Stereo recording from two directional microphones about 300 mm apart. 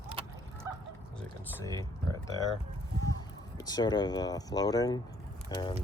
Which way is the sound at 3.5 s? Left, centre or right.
Centre.